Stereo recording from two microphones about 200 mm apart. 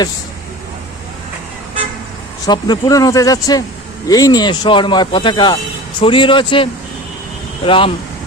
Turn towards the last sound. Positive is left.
turn(degrees=25)  # may be behind; listen again after turning